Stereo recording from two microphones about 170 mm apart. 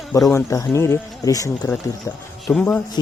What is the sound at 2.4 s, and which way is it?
Speech, 5° left (ahead or behind).